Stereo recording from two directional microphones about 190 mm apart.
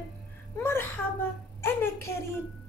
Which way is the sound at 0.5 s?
10° left (ahead or behind).